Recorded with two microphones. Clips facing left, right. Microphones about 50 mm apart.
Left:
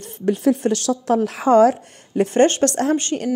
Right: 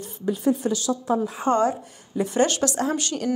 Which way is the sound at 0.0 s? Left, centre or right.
Left.